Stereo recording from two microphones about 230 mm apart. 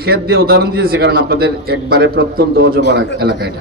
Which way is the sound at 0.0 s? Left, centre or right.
Right.